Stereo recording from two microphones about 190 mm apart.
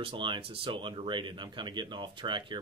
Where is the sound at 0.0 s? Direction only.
25° right (ahead or behind).